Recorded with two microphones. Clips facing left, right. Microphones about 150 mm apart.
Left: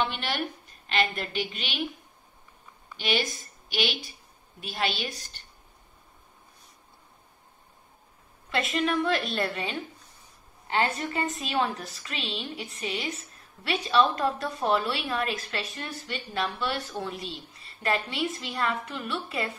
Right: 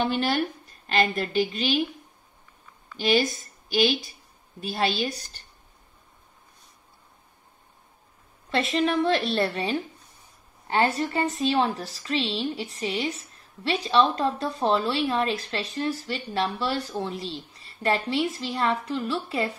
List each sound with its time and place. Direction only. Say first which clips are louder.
0.0 s a woman's voice: right 5 dB; 40° right (ahead or behind)
3.0 s a woman's voice: right 6 dB; 40° right (ahead or behind)
4.6 s a woman's voice: right 4 dB; 40° right (ahead or behind)
8.7 s a woman's voice: right 3 dB; 30° right (ahead or behind)